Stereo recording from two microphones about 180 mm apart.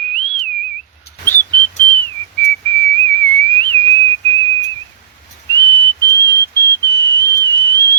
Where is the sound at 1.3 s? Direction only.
10° left (ahead or behind).